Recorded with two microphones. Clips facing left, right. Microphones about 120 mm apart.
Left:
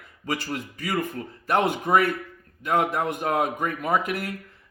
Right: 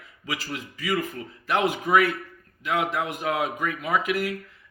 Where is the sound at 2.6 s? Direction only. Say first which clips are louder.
Left 3 dB; 45° left (ahead or behind).